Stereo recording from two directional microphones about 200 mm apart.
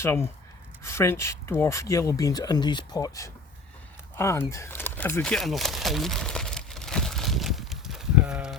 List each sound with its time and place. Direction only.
0.0 s speech: 10° left (ahead or behind)
5.2 s crumpling: centre (ahead or behind)